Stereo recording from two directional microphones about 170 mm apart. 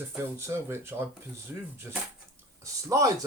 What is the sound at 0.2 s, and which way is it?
Speech, 15° right (ahead or behind).